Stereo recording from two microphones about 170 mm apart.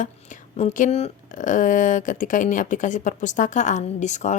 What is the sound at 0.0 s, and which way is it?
Speech, 45° left (ahead or behind).